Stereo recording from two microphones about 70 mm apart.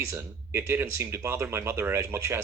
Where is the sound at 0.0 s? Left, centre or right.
Right.